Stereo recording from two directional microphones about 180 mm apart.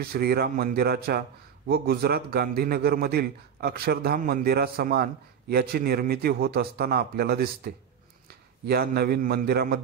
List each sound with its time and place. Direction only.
0.0 s a man's voice: 60° right (ahead or behind)